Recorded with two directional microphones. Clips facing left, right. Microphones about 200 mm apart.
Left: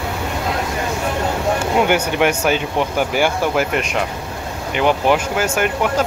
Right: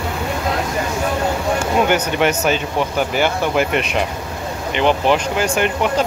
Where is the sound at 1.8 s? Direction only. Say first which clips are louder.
Left 1 dB; 10° left (ahead or behind).